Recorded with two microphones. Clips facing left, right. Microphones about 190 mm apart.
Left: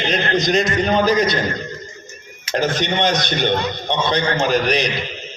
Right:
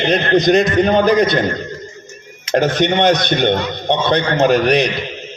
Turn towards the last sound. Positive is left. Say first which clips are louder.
# right 5 dB
turn(degrees=-60)  # may be behind; listen again after turning